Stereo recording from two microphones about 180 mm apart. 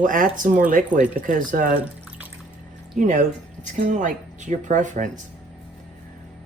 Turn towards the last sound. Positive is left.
turn(degrees=-45)  # may be behind; listen again after turning